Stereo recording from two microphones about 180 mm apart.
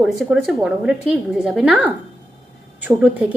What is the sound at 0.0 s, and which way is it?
A woman's voice, centre (ahead or behind).